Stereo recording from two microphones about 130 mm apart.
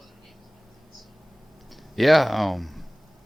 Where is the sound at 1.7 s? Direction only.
Centre (ahead or behind).